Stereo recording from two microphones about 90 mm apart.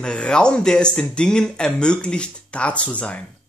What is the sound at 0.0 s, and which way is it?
A woman's voice, 10° left (ahead or behind).